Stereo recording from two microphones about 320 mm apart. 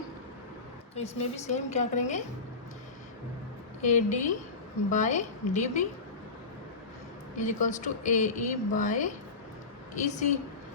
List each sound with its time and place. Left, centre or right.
0.9 s speech: centre
3.8 s speech: left
7.3 s speech: left